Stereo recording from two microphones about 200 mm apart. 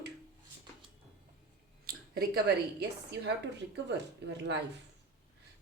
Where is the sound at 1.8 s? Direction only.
50° right (ahead or behind).